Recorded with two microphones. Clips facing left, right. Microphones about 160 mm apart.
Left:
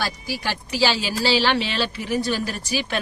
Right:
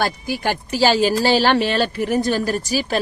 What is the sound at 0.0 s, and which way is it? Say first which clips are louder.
Speech: right 6 dB; 50° right (ahead or behind).